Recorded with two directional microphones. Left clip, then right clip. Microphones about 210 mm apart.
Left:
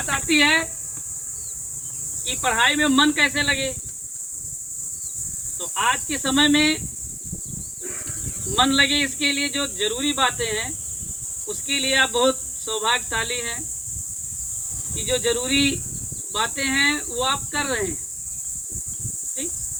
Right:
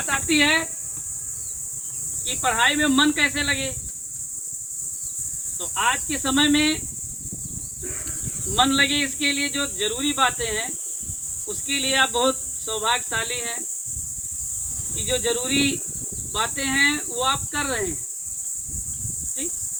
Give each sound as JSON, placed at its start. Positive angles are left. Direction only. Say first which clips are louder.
{"t": 0.3, "sound": "speech", "louder": "left 2 dB", "side_deg": 25}
{"t": 2.2, "sound": "speech", "louder": "left 1 dB", "side_deg": 25}
{"t": 5.5, "sound": "speech", "louder": "left 1 dB", "side_deg": 25}
{"t": 8.5, "sound": "speech", "louder": "left 1 dB", "side_deg": 25}
{"t": 14.9, "sound": "speech", "louder": "left 2 dB", "side_deg": 25}